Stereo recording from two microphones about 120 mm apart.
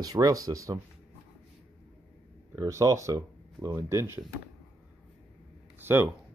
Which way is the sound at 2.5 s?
30° right (ahead or behind).